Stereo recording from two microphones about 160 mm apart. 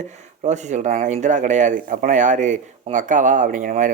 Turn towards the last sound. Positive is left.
turn(degrees=-55)  # may be behind; listen again after turning